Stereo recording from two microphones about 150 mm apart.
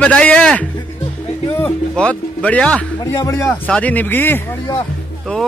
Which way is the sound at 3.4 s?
10° left (ahead or behind).